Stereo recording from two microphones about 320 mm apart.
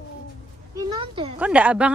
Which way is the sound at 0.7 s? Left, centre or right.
Centre.